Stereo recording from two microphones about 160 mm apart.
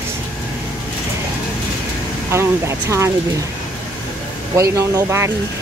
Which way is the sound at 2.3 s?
15° right (ahead or behind).